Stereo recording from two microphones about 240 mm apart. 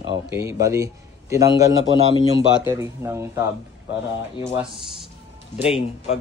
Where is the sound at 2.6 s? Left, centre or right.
Centre.